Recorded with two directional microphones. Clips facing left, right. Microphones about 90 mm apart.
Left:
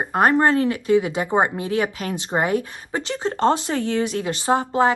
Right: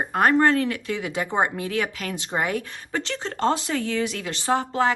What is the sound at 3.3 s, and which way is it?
A woman's voice, 30° left (ahead or behind).